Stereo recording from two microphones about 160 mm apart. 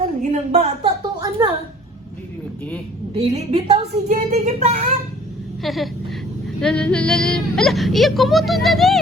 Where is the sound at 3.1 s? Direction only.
40° right (ahead or behind).